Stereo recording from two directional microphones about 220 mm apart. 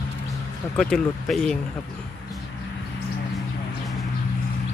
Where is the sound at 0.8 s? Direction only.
Centre (ahead or behind).